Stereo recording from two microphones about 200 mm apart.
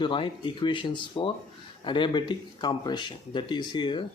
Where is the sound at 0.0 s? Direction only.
25° left (ahead or behind).